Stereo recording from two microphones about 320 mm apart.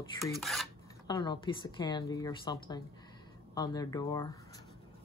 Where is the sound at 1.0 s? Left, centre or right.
Centre.